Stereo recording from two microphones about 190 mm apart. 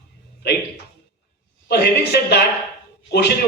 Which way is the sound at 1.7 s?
60° left (ahead or behind).